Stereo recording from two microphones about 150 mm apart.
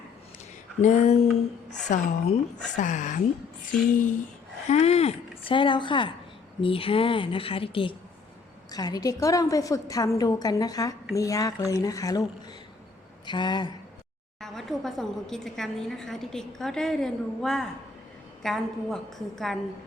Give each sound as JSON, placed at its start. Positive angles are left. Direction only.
{"t": 0.8, "sound": "a woman's voice", "side_deg": 55}
{"t": 4.7, "sound": "a sound", "side_deg": 45}
{"t": 5.5, "sound": "a woman's voice", "side_deg": 35}
{"t": 8.7, "sound": "a woman's voice", "side_deg": 25}
{"t": 13.2, "sound": "a woman's voice", "side_deg": 30}
{"t": 14.4, "sound": "a woman's voice", "side_deg": 0}